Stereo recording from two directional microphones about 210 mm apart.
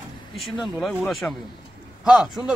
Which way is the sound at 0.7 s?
Centre (ahead or behind).